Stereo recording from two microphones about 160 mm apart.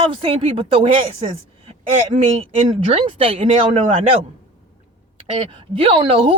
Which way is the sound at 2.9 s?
35° right (ahead or behind).